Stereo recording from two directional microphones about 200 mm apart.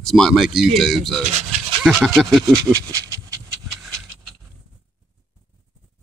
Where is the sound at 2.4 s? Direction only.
20° right (ahead or behind).